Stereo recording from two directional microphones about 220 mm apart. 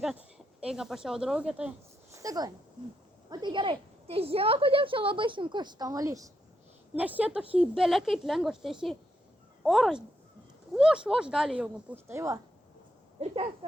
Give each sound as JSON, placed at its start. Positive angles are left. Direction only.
{"t": 0.0, "sound": "speech", "side_deg": -5}
{"t": 2.1, "sound": "a woman's voice", "side_deg": -15}
{"t": 13.1, "sound": "speech", "side_deg": -25}